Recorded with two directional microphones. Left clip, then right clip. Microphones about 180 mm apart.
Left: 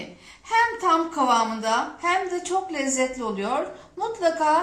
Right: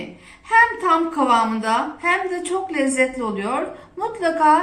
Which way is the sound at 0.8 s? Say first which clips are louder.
Right 3 dB; 60° left (ahead or behind).